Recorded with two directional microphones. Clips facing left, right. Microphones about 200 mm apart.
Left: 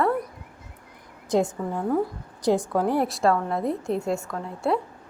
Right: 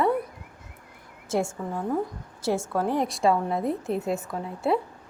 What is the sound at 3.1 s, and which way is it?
A woman's voice, centre (ahead or behind).